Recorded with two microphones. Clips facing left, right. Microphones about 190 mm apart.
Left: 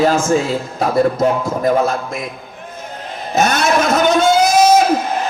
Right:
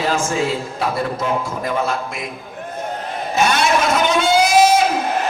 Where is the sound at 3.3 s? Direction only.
45° left (ahead or behind).